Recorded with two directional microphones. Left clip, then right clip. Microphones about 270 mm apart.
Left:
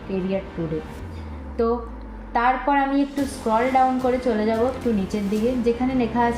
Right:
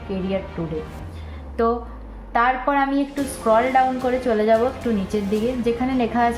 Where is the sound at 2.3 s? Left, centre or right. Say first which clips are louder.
Right 1 dB; centre.